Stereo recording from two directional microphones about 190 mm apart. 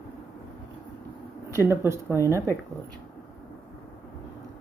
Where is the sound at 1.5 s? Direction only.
15° right (ahead or behind).